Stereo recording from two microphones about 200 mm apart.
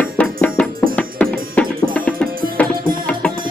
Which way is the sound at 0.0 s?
5° left (ahead or behind).